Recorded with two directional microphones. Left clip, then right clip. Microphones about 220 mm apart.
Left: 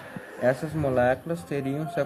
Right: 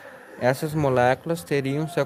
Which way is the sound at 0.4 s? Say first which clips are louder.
Right 2 dB; 45° right (ahead or behind).